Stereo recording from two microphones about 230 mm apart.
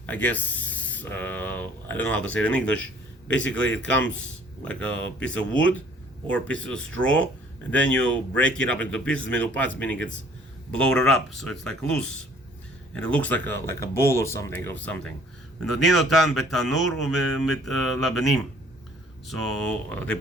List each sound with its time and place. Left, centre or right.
0.0 s speech: centre
15.6 s speech: right
15.9 s speech: centre
17.0 s speech: right
17.8 s speech: centre